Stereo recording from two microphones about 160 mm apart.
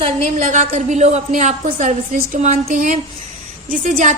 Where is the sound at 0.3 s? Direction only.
50° right (ahead or behind).